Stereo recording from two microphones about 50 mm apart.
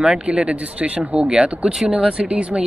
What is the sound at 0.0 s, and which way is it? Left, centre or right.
Speech, centre.